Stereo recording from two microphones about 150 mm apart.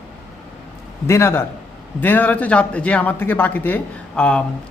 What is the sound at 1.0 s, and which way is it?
A woman's voice, 15° left (ahead or behind).